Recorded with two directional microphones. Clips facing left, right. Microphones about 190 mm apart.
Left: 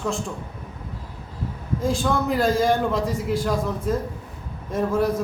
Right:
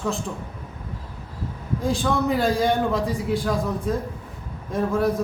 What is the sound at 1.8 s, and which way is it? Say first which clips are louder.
Speech: even; centre (ahead or behind).